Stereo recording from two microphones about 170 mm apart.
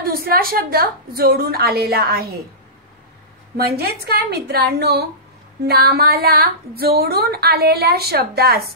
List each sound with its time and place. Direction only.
0.0 s a woman's voice: 60° right (ahead or behind)
3.5 s speech: 65° right (ahead or behind)